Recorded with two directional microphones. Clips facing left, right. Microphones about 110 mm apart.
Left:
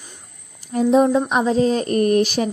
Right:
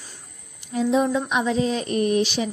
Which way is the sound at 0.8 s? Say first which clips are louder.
Left 5 dB; 45° left (ahead or behind).